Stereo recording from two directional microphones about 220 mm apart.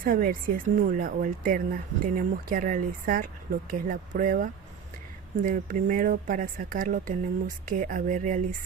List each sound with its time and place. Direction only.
0.0 s speech: 40° right (ahead or behind)